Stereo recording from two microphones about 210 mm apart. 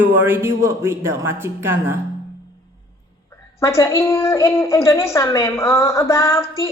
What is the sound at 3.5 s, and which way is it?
A woman's voice, 15° left (ahead or behind).